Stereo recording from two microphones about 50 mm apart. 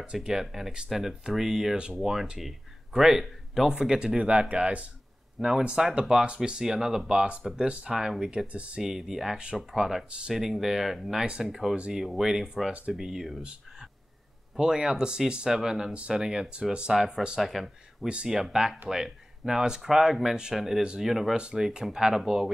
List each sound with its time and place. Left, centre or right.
0.0 s speech: centre
8.5 s speech: right
8.8 s speech: centre
10.0 s speech: right
10.3 s speech: centre
14.6 s speech: centre
17.4 s speech: centre
18.0 s speech: centre